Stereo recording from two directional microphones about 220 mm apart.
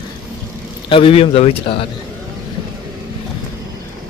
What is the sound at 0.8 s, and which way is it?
Speech, 25° left (ahead or behind).